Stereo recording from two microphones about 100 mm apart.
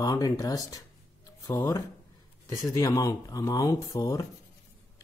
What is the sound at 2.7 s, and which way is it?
Speech, 35° left (ahead or behind).